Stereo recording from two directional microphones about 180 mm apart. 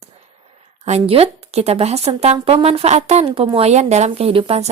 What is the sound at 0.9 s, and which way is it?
A woman's voice, 35° right (ahead or behind).